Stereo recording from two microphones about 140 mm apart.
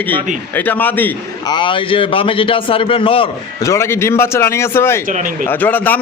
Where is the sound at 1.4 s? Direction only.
35° left (ahead or behind).